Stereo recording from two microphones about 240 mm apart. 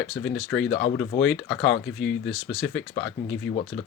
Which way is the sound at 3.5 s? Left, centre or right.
Left.